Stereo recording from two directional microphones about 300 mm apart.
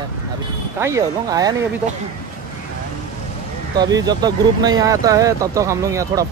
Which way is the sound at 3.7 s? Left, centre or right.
Centre.